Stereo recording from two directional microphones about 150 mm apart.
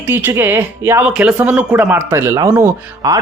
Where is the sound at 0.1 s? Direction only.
15° right (ahead or behind).